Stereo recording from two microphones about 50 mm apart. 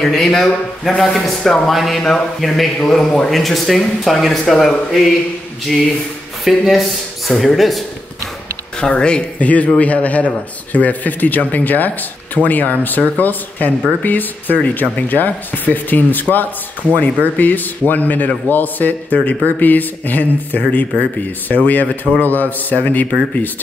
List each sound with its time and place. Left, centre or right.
0.0 s a man's voice: centre
6.4 s a man's voice: centre
8.7 s speech: centre; by 23.0 s left